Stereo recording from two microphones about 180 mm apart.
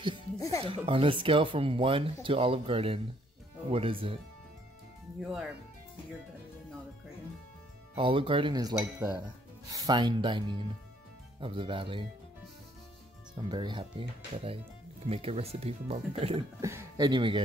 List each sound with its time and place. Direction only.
0.4 s speech: 20° left (ahead or behind)
0.7 s speech: 30° right (ahead or behind)
7.9 s speech: 30° right (ahead or behind)
13.5 s speech: 25° right (ahead or behind)
16.6 s speech: 20° right (ahead or behind)